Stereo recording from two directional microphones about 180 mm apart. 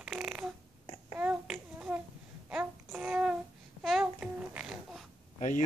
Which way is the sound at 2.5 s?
5° right (ahead or behind).